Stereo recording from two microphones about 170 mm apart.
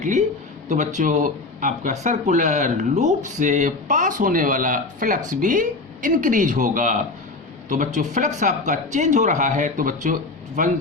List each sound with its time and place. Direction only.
0.0 s a man's voice: 45° right (ahead or behind)